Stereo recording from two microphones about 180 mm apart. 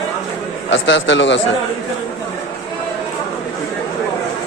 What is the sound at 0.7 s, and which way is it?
Speech, 90° left.